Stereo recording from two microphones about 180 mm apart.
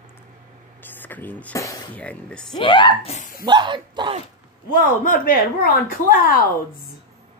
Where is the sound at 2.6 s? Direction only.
30° left (ahead or behind).